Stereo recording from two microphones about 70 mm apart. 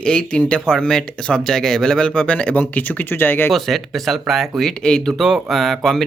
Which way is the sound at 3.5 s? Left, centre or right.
Centre.